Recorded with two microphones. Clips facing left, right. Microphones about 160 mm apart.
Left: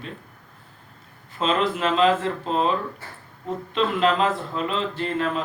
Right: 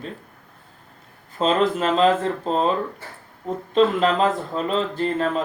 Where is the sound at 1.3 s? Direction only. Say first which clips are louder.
Right 3 dB; 40° right (ahead or behind).